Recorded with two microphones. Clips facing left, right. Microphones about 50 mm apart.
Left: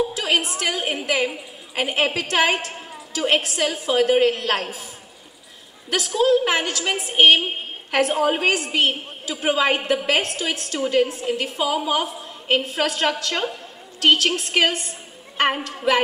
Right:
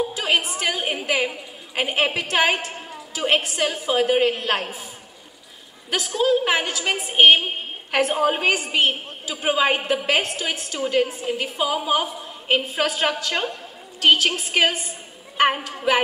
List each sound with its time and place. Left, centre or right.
0.1 s a woman's voice: centre
5.9 s a woman's voice: centre